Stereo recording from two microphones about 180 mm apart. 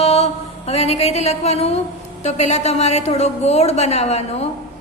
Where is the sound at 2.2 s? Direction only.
40° left (ahead or behind).